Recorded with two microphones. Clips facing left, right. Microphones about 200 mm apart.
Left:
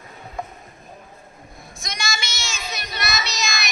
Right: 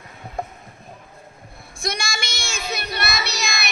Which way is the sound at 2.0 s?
60° right (ahead or behind).